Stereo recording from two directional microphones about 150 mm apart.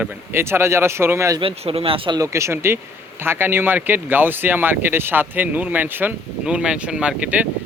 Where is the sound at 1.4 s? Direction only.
40° right (ahead or behind).